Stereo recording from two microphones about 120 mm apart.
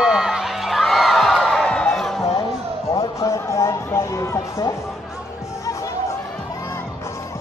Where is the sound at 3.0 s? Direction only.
25° left (ahead or behind).